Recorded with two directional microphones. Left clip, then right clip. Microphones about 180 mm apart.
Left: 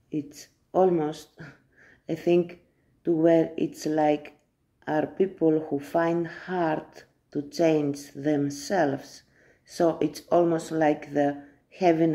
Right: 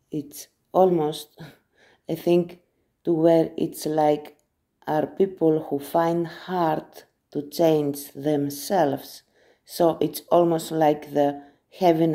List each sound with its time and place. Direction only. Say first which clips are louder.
0.1 s speech: right 1 dB; 25° right (ahead or behind)